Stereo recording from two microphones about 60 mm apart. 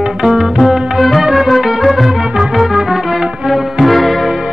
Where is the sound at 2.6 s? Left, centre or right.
Centre.